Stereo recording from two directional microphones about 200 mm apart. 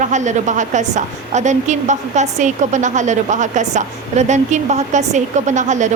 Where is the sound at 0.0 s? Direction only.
40° right (ahead or behind).